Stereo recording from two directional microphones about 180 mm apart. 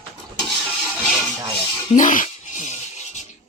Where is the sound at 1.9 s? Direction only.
45° left (ahead or behind).